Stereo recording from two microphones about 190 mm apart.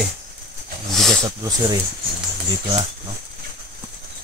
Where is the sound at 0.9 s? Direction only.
Centre (ahead or behind).